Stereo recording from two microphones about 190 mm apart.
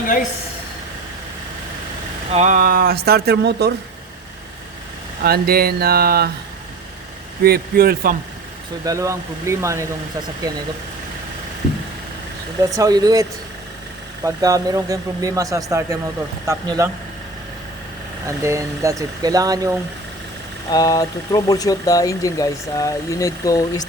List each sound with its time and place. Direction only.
2.3 s speech: 40° right (ahead or behind); by 3.7 s 60° right (ahead or behind)
5.2 s speech: 55° right (ahead or behind)
7.4 s speech: 55° right (ahead or behind)
8.8 s speech: 15° right (ahead or behind)
12.7 s speech: 20° right (ahead or behind)
14.3 s speech: 20° right (ahead or behind)
18.3 s speech: 15° right (ahead or behind)
20.7 s speech: 20° left (ahead or behind)